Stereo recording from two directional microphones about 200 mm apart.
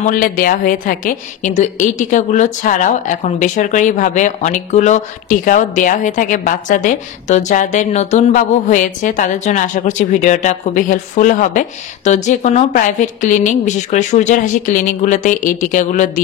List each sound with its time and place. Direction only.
0.0 s a woman's voice: 45° left (ahead or behind)